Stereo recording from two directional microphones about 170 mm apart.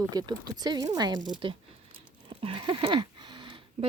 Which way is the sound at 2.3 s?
30° right (ahead or behind).